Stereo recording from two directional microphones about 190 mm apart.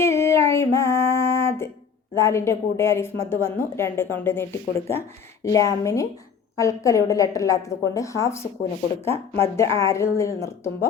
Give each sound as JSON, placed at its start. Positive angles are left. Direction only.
{"t": 0.0, "sound": "female singing", "side_deg": 15}
{"t": 2.1, "sound": "a woman's voice", "side_deg": 15}